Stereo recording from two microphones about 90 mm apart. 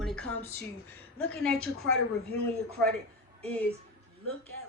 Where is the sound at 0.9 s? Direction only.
20° left (ahead or behind).